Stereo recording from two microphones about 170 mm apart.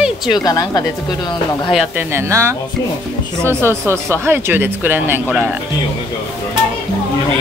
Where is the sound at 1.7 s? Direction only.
15° right (ahead or behind).